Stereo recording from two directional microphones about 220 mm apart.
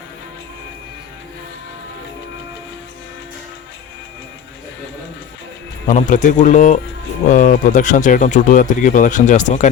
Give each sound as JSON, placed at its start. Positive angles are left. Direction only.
{"t": 5.9, "sound": "speech", "side_deg": 35}